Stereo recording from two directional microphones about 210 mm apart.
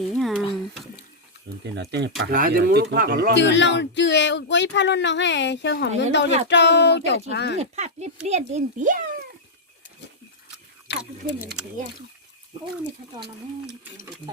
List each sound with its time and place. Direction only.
0.1 s a sound: centre (ahead or behind)
1.6 s speech: 55° right (ahead or behind)
3.3 s speech: 55° left (ahead or behind)
7.6 s speech: 30° right (ahead or behind)
10.9 s a sound: 55° left (ahead or behind)
11.6 s speech: 5° right (ahead or behind)
13.1 s speech: 50° right (ahead or behind)